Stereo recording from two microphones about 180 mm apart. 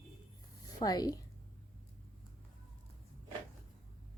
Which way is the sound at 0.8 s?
20° left (ahead or behind).